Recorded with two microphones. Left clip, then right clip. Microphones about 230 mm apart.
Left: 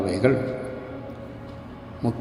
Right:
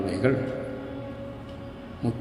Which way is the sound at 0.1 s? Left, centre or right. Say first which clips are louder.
Left 4 dB; centre.